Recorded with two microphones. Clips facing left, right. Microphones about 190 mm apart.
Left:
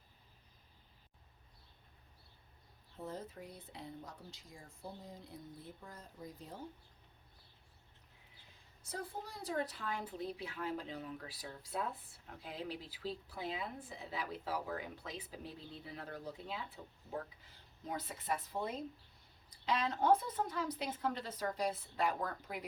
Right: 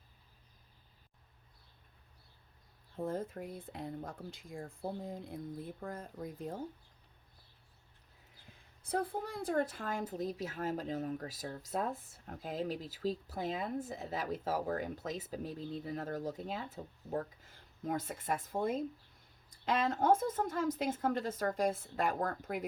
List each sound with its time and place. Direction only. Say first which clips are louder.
2.9 s speech: right 8 dB; 50° right (ahead or behind)
8.8 s speech: right 9 dB; 55° right (ahead or behind)